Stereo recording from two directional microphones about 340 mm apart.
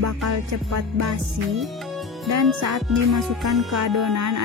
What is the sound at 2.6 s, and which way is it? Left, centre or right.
Music, right.